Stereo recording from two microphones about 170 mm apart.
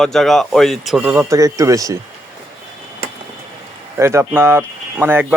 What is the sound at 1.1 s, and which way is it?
Speech, 20° right (ahead or behind).